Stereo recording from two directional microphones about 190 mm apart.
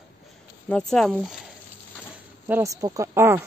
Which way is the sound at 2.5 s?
15° right (ahead or behind).